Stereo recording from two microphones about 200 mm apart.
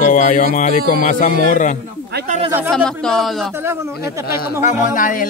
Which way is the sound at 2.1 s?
40° right (ahead or behind).